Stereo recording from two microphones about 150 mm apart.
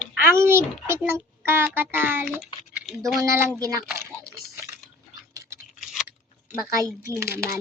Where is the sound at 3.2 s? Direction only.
20° right (ahead or behind).